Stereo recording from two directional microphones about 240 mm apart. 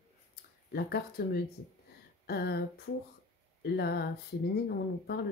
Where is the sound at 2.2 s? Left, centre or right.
Left.